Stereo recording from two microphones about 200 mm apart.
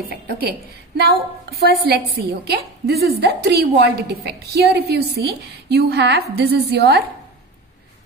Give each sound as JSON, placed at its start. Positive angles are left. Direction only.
{"t": 0.1, "sound": "a woman's voice", "side_deg": -50}